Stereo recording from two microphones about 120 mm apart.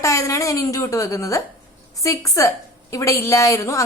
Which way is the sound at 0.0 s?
25° left (ahead or behind).